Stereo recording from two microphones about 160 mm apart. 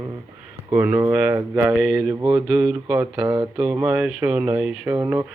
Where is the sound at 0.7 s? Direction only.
15° right (ahead or behind).